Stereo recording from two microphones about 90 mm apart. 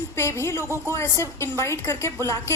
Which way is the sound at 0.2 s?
30° left (ahead or behind).